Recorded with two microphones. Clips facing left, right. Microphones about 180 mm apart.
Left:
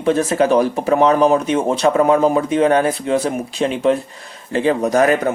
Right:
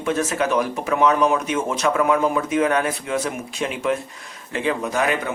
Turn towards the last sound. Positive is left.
turn(degrees=40)  # may be behind; listen again after turning